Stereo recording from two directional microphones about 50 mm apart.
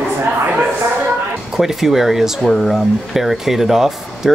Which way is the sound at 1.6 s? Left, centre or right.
Centre.